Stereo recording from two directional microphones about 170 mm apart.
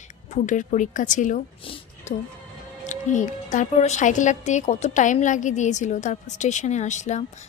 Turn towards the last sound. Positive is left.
turn(degrees=45)  # may be behind; listen again after turning